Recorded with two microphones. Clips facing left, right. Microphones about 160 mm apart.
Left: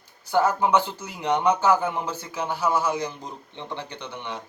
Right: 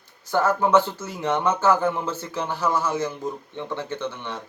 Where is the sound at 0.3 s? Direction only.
15° left (ahead or behind).